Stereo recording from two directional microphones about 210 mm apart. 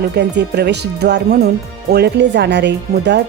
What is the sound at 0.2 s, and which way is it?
Speech, 50° right (ahead or behind).